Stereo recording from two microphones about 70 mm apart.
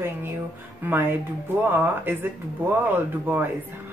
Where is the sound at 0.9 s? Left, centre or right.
Right.